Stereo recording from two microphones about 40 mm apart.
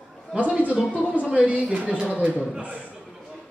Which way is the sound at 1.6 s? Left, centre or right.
Right.